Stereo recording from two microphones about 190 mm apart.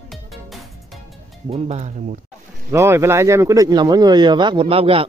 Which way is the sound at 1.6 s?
35° right (ahead or behind).